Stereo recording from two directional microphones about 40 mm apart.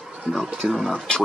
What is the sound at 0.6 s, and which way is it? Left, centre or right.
Speech, centre.